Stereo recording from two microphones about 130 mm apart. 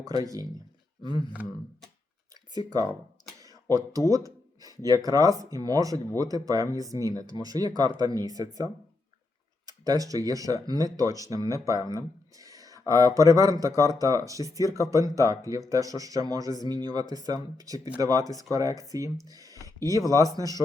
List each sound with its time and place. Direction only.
0.1 s speech: 30° right (ahead or behind)
2.3 s speech: 30° right (ahead or behind)
3.4 s a sound: 25° right (ahead or behind)
4.1 s speech: 25° right (ahead or behind)